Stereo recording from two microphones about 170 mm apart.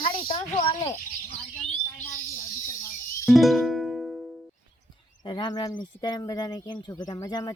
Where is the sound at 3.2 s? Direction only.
Centre (ahead or behind).